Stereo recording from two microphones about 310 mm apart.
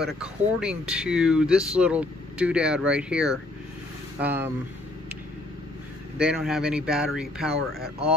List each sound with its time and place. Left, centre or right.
0.0 s speech: centre
6.1 s speech: centre